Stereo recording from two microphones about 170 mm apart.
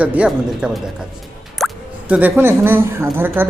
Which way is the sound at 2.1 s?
10° right (ahead or behind).